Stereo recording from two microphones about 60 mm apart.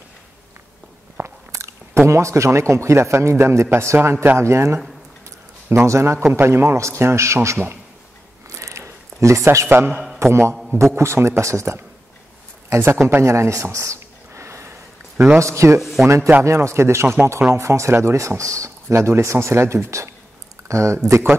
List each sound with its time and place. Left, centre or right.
1.2 s biting: right
1.5 s speech: right
5.9 s speech: right
6.3 s speech: right
8.5 s a sound: right
9.7 s a man's voice: right
10.1 s speech: right
10.5 s a sound: centre
10.8 s speech: right
12.6 s a sound: right
15.3 s speech: right
15.8 s a sound: centre
16.4 s speech: right